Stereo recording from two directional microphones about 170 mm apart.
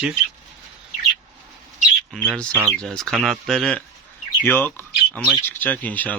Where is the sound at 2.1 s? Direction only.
Centre (ahead or behind).